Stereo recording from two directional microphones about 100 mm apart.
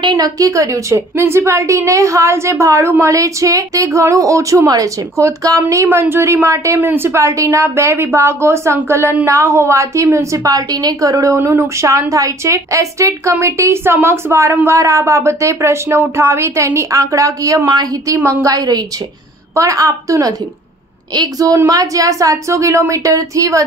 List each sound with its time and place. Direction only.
0.0 s a woman's voice: 40° right (ahead or behind)
10.4 s a woman's voice: 40° right (ahead or behind)